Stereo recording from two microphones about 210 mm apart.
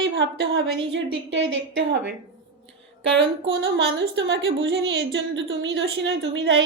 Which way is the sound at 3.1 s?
60° right (ahead or behind).